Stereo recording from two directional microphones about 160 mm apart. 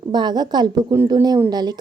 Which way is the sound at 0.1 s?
25° right (ahead or behind).